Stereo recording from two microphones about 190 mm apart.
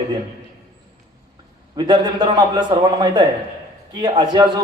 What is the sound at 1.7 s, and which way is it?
A man's voice, 20° right (ahead or behind).